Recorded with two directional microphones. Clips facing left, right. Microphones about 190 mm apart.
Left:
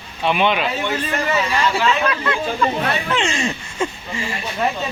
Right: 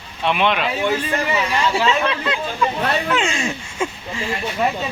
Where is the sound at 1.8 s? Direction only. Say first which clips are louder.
Even; 25° right (ahead or behind).